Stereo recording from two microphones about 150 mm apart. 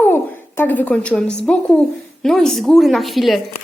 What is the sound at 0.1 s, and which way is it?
A woman's voice, 15° left (ahead or behind).